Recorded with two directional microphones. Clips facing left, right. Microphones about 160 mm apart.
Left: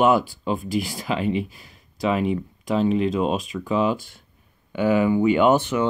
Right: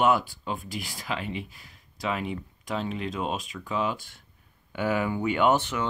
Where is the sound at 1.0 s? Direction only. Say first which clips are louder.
Left 6 dB; 25° left (ahead or behind).